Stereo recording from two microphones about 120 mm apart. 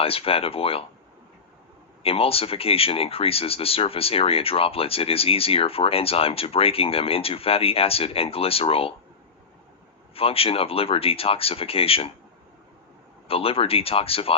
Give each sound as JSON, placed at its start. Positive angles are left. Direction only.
{"t": 0.0, "sound": "speech", "side_deg": 50}
{"t": 2.0, "sound": "speech", "side_deg": 55}
{"t": 10.2, "sound": "speech", "side_deg": 50}
{"t": 13.2, "sound": "speech", "side_deg": 50}